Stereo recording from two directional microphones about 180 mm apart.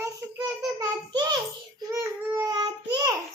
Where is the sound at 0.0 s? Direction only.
20° right (ahead or behind).